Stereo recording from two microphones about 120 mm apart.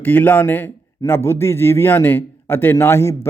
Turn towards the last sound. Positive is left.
turn(degrees=20)  # may be behind; listen again after turning